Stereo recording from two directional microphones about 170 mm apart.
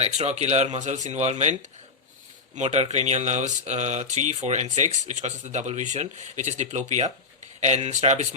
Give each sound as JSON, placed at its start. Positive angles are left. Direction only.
{"t": 0.0, "sound": "speech", "side_deg": -40}
{"t": 2.6, "sound": "speech", "side_deg": -40}
{"t": 7.9, "sound": "speech", "side_deg": -40}